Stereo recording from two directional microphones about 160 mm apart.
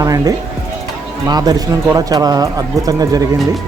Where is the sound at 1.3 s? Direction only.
25° right (ahead or behind).